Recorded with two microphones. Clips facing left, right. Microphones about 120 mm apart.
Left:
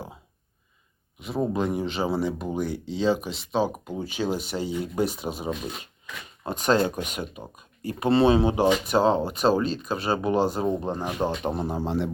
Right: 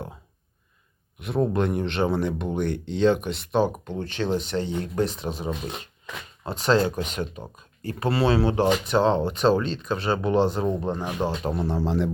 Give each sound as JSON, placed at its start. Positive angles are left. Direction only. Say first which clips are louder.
{"t": 1.2, "sound": "speech", "louder": "right 2 dB", "side_deg": 0}
{"t": 11.9, "sound": "speech", "louder": "right 2 dB", "side_deg": 0}